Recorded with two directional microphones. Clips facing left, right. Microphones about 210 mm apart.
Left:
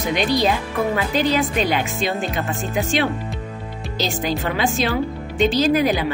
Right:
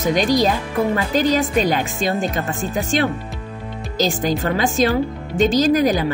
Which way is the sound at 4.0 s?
45° right (ahead or behind).